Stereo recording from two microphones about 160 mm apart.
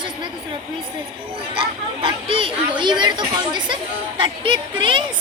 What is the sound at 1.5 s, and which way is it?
Speech, 30° right (ahead or behind).